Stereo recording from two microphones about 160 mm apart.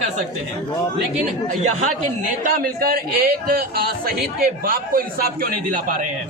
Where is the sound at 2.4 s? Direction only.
60° right (ahead or behind).